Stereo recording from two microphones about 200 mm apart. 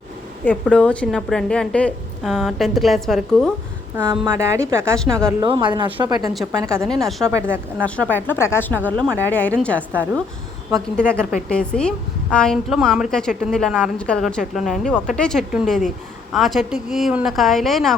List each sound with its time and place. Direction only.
0.4 s a woman's voice: 5° left (ahead or behind)
4.3 s a woman's voice: 15° right (ahead or behind)
8.1 s a woman's voice: 10° left (ahead or behind)